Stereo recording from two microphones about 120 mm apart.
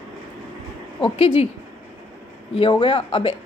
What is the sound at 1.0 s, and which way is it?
Speech, 55° left (ahead or behind).